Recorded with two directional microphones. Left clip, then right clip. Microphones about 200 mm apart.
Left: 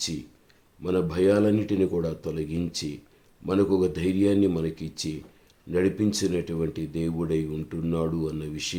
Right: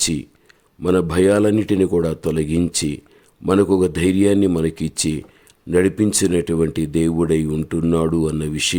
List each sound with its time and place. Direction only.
0.8 s speech: 45° right (ahead or behind)